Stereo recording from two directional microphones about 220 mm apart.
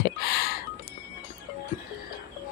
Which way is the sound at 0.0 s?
45° left (ahead or behind).